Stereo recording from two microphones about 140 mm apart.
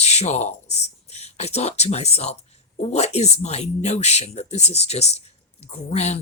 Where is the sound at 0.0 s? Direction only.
50° left (ahead or behind).